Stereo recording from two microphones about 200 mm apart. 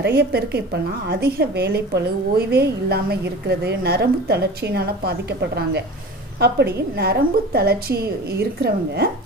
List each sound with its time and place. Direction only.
0.0 s a woman's voice: 55° right (ahead or behind)